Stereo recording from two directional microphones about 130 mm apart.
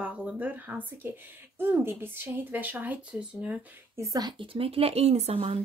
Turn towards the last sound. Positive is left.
turn(degrees=-50)  # may be behind; listen again after turning